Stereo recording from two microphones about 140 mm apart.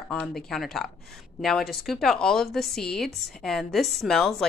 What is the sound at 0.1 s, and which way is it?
A woman's voice, 5° left (ahead or behind).